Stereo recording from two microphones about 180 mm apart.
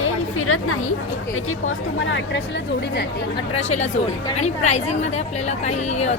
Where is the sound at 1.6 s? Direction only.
90° left.